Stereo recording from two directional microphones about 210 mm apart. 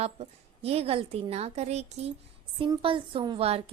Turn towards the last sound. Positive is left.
turn(degrees=-30)  # may be behind; listen again after turning